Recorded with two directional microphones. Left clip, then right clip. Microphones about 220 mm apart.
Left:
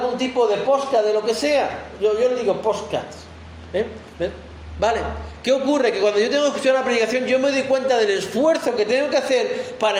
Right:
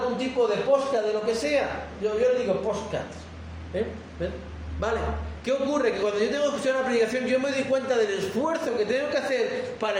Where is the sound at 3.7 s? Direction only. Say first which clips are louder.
Left 6 dB; 25° left (ahead or behind).